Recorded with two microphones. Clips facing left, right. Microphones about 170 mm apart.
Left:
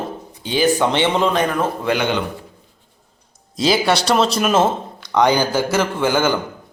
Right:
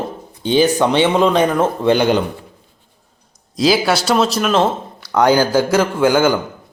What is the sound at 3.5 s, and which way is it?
Speech, centre (ahead or behind).